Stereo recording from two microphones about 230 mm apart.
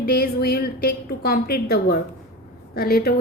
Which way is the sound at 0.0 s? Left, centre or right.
Left.